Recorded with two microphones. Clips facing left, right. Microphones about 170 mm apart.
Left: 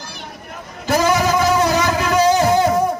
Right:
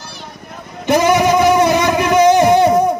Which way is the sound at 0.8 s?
20° right (ahead or behind).